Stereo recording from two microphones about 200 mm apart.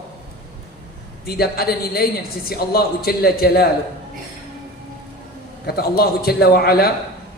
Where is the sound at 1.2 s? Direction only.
50° left (ahead or behind).